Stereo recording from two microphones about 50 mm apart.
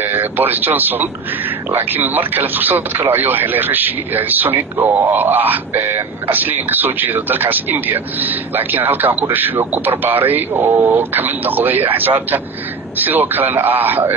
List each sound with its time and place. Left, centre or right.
0.0 s a man's voice: right